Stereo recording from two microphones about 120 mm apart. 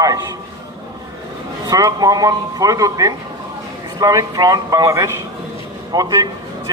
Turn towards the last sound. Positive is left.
turn(degrees=-35)  # may be behind; listen again after turning